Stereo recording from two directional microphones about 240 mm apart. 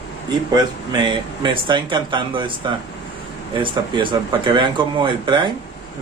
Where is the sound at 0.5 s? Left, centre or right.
Centre.